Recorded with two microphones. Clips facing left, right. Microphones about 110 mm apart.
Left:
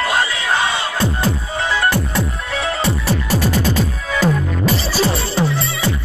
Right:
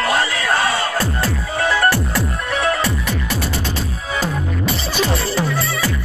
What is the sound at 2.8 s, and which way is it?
Music, 30° left (ahead or behind).